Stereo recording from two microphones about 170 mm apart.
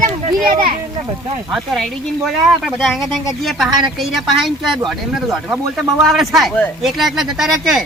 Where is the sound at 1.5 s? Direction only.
Centre (ahead or behind).